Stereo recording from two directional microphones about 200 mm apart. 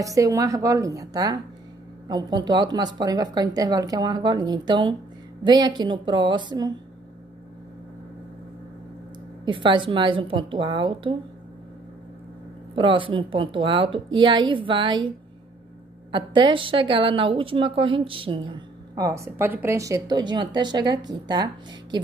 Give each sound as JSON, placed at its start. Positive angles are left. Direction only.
{"t": 0.0, "sound": "a woman's voice", "side_deg": -15}
{"t": 9.4, "sound": "a woman's voice", "side_deg": -25}
{"t": 12.7, "sound": "a woman's voice", "side_deg": -25}